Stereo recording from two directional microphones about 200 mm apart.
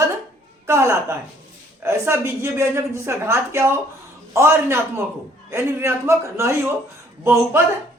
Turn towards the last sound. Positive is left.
turn(degrees=-10)  # may be behind; listen again after turning